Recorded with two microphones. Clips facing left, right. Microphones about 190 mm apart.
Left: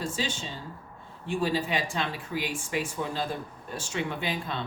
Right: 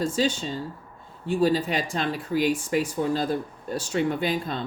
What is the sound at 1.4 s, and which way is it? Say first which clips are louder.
Speech: right 5 dB; 40° right (ahead or behind).